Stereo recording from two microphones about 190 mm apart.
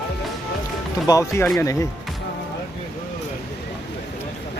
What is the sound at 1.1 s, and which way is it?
Speech, 15° left (ahead or behind).